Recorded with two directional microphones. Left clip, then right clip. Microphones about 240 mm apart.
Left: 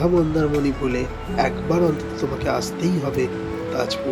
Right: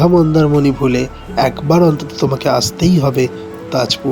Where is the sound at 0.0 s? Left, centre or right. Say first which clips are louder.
Right 8 dB; right.